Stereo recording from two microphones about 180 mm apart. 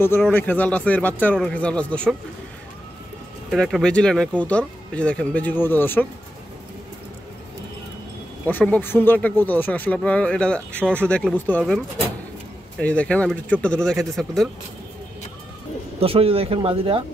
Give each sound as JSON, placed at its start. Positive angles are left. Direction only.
{"t": 0.3, "sound": "speech", "side_deg": 10}
{"t": 3.4, "sound": "speech", "side_deg": 0}
{"t": 8.5, "sound": "speech", "side_deg": 10}
{"t": 12.7, "sound": "speech", "side_deg": 5}
{"t": 16.0, "sound": "speech", "side_deg": -30}